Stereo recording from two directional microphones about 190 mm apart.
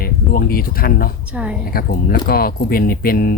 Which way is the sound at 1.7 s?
50° left (ahead or behind).